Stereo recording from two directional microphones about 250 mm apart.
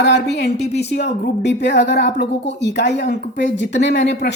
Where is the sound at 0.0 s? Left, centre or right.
Left.